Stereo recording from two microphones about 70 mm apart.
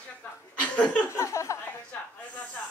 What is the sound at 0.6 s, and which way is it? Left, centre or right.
Chuckle, centre.